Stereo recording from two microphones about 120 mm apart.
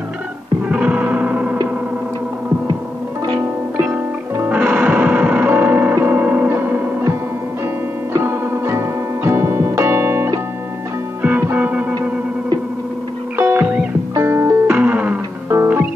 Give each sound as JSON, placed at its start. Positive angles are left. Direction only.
{"t": 0.7, "sound": "music", "side_deg": -10}
{"t": 3.8, "sound": "music", "side_deg": -10}
{"t": 13.4, "sound": "music", "side_deg": -15}
{"t": 14.8, "sound": "music", "side_deg": -10}
{"t": 15.5, "sound": "music", "side_deg": -20}